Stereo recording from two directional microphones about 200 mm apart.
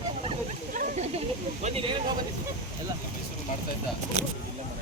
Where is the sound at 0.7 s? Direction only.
40° right (ahead or behind).